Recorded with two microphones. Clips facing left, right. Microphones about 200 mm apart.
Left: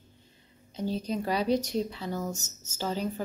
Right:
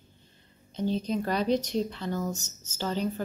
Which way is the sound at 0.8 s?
10° left (ahead or behind).